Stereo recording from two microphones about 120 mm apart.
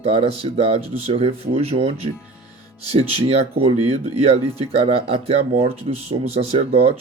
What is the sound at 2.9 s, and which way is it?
Speech, 50° right (ahead or behind).